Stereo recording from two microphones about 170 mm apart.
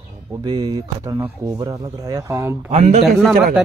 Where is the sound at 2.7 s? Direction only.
40° right (ahead or behind).